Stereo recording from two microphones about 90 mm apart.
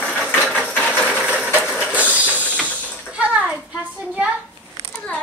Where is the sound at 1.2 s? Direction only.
10° right (ahead or behind).